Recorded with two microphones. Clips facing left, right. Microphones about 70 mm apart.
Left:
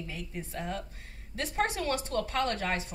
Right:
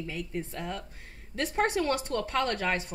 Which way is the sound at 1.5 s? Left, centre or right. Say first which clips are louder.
Right 3 dB; right.